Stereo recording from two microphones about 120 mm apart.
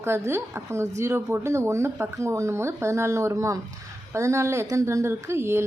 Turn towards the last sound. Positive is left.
turn(degrees=-20)  # may be behind; listen again after turning